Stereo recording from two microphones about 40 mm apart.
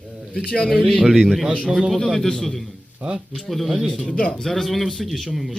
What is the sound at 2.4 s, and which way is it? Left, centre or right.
A man's voice, centre.